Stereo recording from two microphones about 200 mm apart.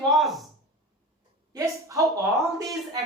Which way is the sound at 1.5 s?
15° right (ahead or behind).